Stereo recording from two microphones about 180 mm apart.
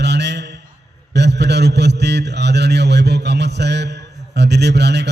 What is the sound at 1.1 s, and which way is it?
A man's voice, 70° right (ahead or behind).